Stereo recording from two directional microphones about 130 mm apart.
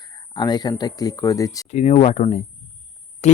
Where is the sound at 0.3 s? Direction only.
30° left (ahead or behind).